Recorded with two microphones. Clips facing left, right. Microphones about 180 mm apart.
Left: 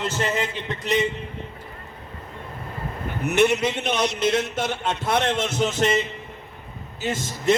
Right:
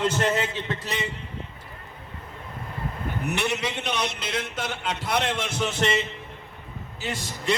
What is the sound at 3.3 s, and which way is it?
Speech, 45° left (ahead or behind).